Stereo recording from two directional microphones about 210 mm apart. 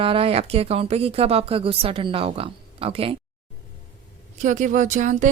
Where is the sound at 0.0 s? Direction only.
25° right (ahead or behind).